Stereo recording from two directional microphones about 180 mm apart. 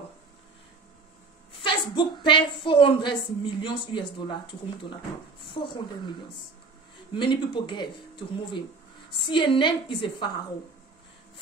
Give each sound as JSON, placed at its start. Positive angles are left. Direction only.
{"t": 1.5, "sound": "a woman's voice", "side_deg": 25}
{"t": 7.2, "sound": "a woman's voice", "side_deg": 25}
{"t": 9.1, "sound": "a woman's voice", "side_deg": 25}